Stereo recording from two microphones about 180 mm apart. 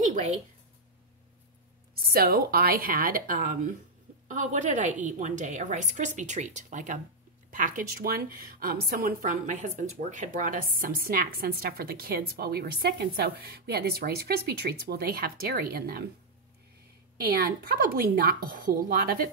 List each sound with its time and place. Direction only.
0.0 s a sound: 45° right (ahead or behind)
2.0 s a woman's voice: 60° right (ahead or behind)
17.2 s a woman's voice: 55° right (ahead or behind)